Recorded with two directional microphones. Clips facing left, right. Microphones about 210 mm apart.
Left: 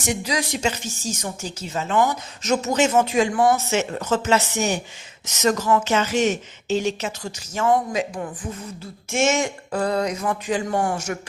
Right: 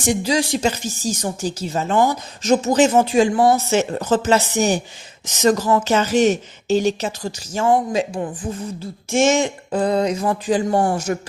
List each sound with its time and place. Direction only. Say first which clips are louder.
0.0 s speech: right 6 dB; 30° right (ahead or behind)